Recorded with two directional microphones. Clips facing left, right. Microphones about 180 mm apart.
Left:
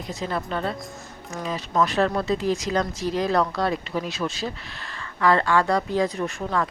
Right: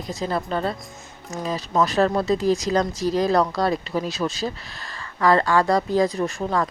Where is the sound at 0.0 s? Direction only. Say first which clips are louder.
Right 3 dB; 40° right (ahead or behind).